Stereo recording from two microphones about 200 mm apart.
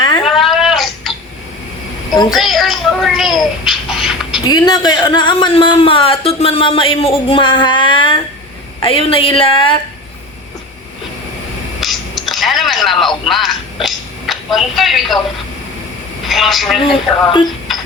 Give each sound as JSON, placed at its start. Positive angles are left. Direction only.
{"t": 0.3, "sound": "cat", "side_deg": 0}
{"t": 2.3, "sound": "a child's voice", "side_deg": 0}
{"t": 3.7, "sound": "a sound", "side_deg": 0}
{"t": 4.4, "sound": "speech", "side_deg": 20}
{"t": 11.8, "sound": "telephone", "side_deg": 0}
{"t": 13.8, "sound": "a woman's voice", "side_deg": 0}
{"t": 16.2, "sound": "speech", "side_deg": 0}
{"t": 16.8, "sound": "speech", "side_deg": 25}
{"t": 17.7, "sound": "music", "side_deg": 0}